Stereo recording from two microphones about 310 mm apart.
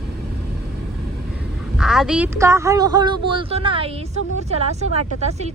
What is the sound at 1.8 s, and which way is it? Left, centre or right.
A woman's voice, centre.